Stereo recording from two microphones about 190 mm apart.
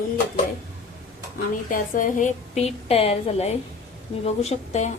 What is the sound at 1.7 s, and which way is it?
A woman's voice, 45° left (ahead or behind).